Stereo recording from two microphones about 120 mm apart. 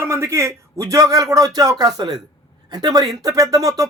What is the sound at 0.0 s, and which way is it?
A man's voice, 25° right (ahead or behind).